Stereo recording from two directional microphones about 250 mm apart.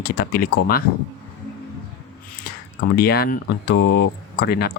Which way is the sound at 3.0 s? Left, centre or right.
Left.